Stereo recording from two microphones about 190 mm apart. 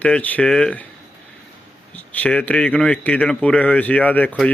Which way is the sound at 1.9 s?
10° left (ahead or behind).